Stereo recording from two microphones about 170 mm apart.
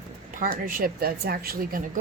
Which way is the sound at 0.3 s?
55° right (ahead or behind).